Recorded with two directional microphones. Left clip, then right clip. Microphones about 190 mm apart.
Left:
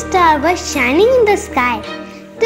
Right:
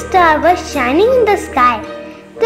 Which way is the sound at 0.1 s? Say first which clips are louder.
Right 2 dB; 25° left (ahead or behind).